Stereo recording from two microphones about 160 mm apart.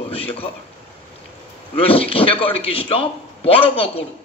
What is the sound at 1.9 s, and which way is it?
A man's voice, 35° left (ahead or behind).